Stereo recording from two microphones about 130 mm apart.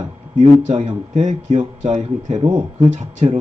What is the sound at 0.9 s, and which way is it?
Speech, 65° right (ahead or behind).